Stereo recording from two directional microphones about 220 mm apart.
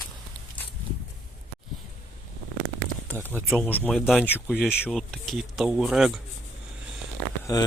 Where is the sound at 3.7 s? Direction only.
5° left (ahead or behind).